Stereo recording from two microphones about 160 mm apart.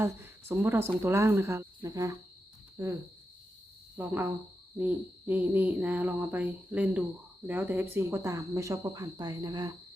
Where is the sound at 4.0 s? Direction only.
15° right (ahead or behind).